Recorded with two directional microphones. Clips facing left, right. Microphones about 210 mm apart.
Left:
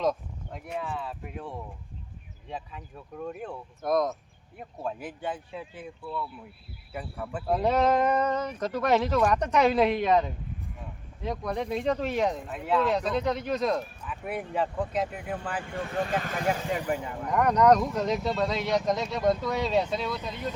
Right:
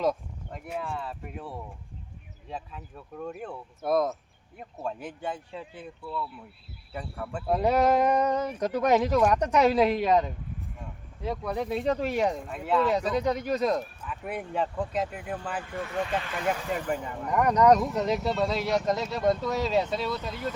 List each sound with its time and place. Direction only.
0.0 s speech: centre (ahead or behind)
6.9 s speech: 5° left (ahead or behind)
16.0 s speech: 45° left (ahead or behind)
16.7 s speech: 5° left (ahead or behind)